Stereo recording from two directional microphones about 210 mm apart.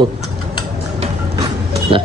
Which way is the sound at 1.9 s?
25° right (ahead or behind).